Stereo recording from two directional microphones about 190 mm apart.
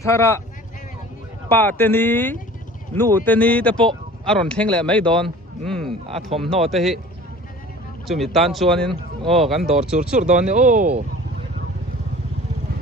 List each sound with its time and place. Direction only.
0.0 s speech: 15° left (ahead or behind)
1.5 s speech: 10° left (ahead or behind)
8.0 s speech: centre (ahead or behind)
10.2 s speech: 40° right (ahead or behind)